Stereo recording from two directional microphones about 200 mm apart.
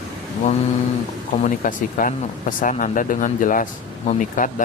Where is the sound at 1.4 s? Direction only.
40° left (ahead or behind).